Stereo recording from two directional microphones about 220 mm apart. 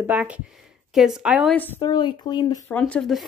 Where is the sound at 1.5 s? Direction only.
15° left (ahead or behind).